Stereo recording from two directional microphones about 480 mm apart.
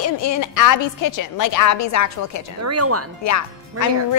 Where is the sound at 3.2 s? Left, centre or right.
Left.